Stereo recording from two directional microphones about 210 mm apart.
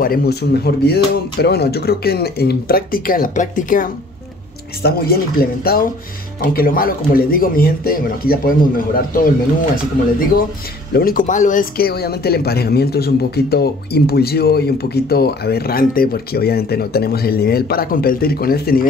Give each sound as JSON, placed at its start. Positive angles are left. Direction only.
{"t": 0.0, "sound": "speech", "side_deg": 45}
{"t": 10.9, "sound": "speech", "side_deg": 45}